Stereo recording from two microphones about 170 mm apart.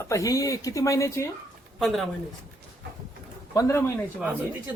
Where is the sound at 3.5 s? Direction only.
20° left (ahead or behind).